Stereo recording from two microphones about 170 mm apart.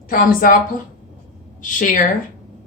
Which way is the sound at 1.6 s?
50° left (ahead or behind).